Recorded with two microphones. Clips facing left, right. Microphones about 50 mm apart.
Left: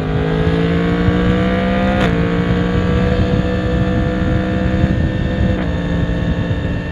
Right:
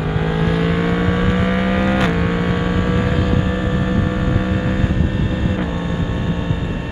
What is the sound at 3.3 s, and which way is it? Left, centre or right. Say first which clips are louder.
Vehicle: left 2 dB; centre.